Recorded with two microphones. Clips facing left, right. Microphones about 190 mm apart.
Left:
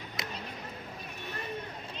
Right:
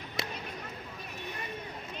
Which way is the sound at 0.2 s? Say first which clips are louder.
Right 4 dB; 30° right (ahead or behind).